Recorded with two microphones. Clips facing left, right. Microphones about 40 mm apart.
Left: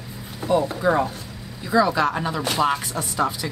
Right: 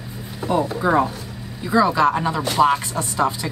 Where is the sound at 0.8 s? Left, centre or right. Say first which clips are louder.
Right 2 dB; centre.